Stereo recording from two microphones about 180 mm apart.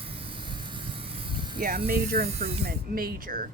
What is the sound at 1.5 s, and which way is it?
Speech, 50° right (ahead or behind).